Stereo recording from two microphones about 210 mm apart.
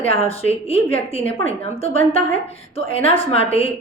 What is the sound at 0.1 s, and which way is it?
Speech, 30° left (ahead or behind).